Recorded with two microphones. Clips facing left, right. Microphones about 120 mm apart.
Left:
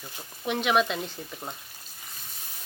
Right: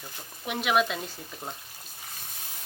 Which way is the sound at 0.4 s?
5° right (ahead or behind).